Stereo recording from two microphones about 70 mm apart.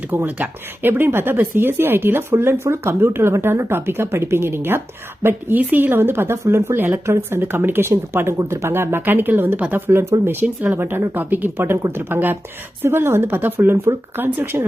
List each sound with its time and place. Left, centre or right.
0.1 s speech: right
10.0 s speech: right
10.4 s speech: centre
10.8 s speech: right